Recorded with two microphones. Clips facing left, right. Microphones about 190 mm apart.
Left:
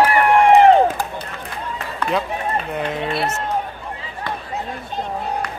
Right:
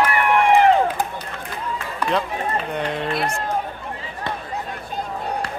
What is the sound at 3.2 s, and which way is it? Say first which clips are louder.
Run: left 1 dB; 20° left (ahead or behind).